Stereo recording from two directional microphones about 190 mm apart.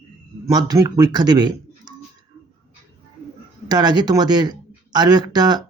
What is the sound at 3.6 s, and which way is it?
Speech, 20° right (ahead or behind).